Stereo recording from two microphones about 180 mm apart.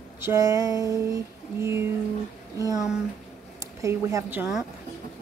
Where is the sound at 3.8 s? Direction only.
15° right (ahead or behind).